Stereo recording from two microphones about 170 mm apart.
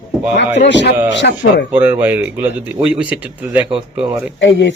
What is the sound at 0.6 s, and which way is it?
Speech, 90° left.